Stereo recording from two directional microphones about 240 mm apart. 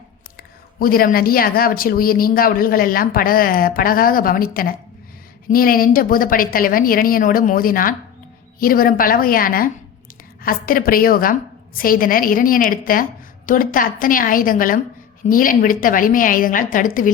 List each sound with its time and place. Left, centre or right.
0.3 s speech: left